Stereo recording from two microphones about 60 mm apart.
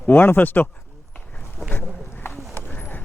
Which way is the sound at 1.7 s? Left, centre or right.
Left.